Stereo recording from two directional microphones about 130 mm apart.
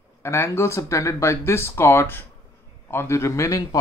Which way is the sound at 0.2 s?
20° left (ahead or behind).